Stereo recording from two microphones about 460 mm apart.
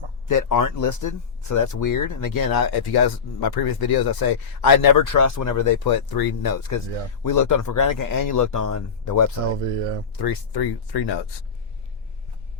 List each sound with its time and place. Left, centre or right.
0.3 s a man's voice: left
10.2 s speech: left